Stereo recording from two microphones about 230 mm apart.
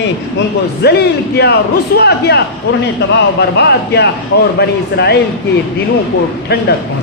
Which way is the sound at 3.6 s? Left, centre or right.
Left.